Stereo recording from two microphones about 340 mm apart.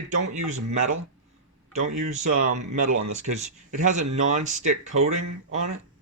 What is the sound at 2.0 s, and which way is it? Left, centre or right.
Speech, right.